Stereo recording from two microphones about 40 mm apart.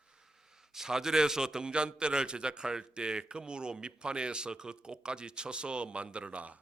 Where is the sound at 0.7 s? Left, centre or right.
Centre.